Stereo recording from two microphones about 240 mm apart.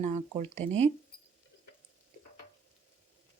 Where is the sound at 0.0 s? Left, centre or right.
Right.